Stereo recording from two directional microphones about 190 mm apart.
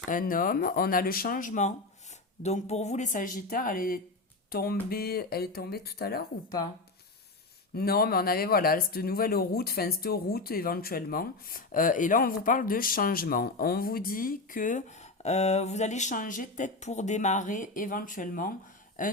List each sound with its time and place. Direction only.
0.1 s speech: 45° left (ahead or behind)
7.8 s speech: 55° left (ahead or behind)